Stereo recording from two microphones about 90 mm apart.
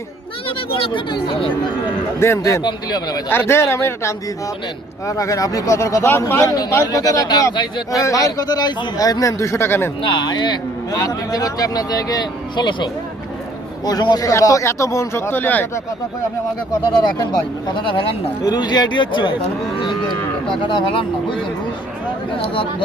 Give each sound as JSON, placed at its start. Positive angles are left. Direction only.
{"t": 0.4, "sound": "speech", "side_deg": 75}
{"t": 2.1, "sound": "speech", "side_deg": 30}
{"t": 2.6, "sound": "speech", "side_deg": 50}
{"t": 3.2, "sound": "speech", "side_deg": 25}
{"t": 6.8, "sound": "speech", "side_deg": 40}
{"t": 10.0, "sound": "speech", "side_deg": 65}
{"t": 10.9, "sound": "speech", "side_deg": 45}
{"t": 17.2, "sound": "speech", "side_deg": 50}
{"t": 18.4, "sound": "speech", "side_deg": 50}